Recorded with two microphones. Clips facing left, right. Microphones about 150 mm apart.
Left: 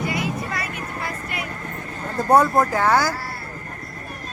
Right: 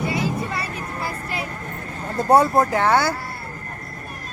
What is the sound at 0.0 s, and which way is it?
Vehicle, 30° right (ahead or behind).